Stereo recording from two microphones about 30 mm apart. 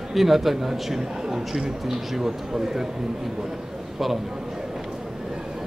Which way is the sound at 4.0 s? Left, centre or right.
Centre.